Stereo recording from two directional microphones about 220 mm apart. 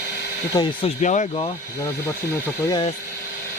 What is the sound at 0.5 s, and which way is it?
Speech, 20° left (ahead or behind).